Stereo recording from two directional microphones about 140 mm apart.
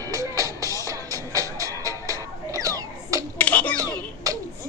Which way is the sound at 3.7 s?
25° right (ahead or behind).